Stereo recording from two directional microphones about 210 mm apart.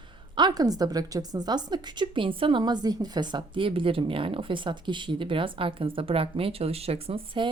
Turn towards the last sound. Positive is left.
turn(degrees=-25)  # may be behind; listen again after turning